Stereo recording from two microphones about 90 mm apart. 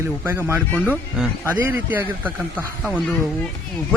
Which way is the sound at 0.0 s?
25° right (ahead or behind).